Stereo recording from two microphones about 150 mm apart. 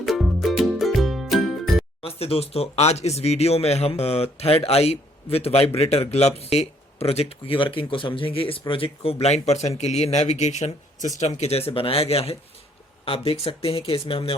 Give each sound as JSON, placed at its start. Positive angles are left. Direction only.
{"t": 0.0, "sound": "music", "side_deg": 0}
{"t": 2.0, "sound": "speech", "side_deg": 40}